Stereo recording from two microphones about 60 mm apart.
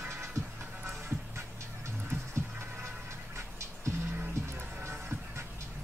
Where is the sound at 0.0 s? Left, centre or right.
Right.